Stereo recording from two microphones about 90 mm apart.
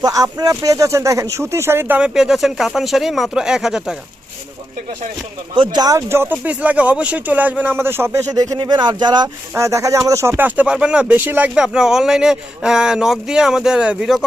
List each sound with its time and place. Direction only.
0.0 s speech: 40° right (ahead or behind); by 2.0 s 25° right (ahead or behind)
2.0 s speech: 10° right (ahead or behind)
5.5 s speech: 50° right (ahead or behind); by 6.3 s 30° right (ahead or behind)
6.4 s speech: 15° right (ahead or behind); by 8.5 s 40° right (ahead or behind)
8.5 s speech: 55° right (ahead or behind)
9.6 s speech: 35° right (ahead or behind); by 11.5 s 20° right (ahead or behind)
11.5 s speech: 5° right (ahead or behind)